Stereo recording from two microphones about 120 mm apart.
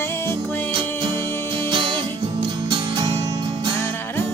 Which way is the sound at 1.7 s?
40° right (ahead or behind).